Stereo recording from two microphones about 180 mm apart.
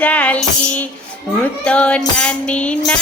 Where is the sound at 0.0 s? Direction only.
5° left (ahead or behind).